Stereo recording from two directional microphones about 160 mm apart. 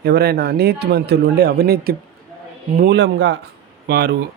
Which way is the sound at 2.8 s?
90° right.